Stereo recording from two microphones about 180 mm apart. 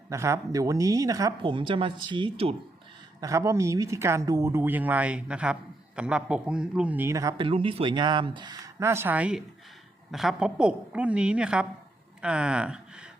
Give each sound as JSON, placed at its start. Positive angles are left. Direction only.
{"t": 0.1, "sound": "a woman's voice", "side_deg": -15}
{"t": 3.2, "sound": "a man's voice", "side_deg": -20}